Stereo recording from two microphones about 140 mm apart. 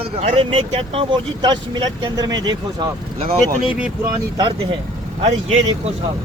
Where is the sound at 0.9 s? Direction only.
30° right (ahead or behind).